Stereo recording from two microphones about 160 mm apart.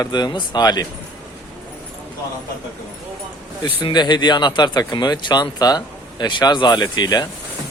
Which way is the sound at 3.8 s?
30° left (ahead or behind).